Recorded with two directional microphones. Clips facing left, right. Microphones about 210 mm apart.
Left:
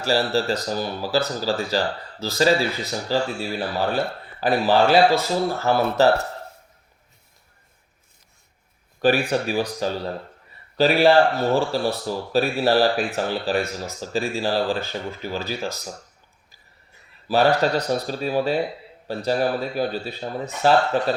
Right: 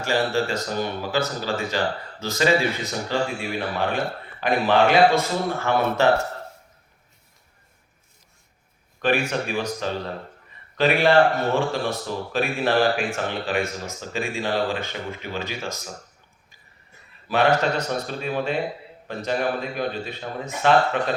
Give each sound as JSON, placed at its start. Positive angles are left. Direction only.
{"t": 0.0, "sound": "speech", "side_deg": 35}
{"t": 9.0, "sound": "speech", "side_deg": 35}
{"t": 17.2, "sound": "speech", "side_deg": 35}